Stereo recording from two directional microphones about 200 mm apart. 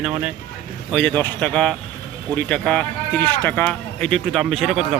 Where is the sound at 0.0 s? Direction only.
5° right (ahead or behind).